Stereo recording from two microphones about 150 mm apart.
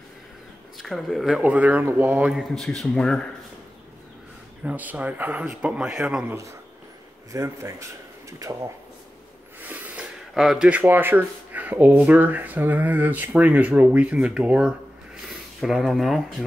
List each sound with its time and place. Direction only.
0.7 s speech: centre (ahead or behind)
2.5 s a man's voice: centre (ahead or behind)
4.6 s speech: 10° right (ahead or behind)
7.3 s speech: 20° right (ahead or behind)
9.6 s speech: 10° right (ahead or behind)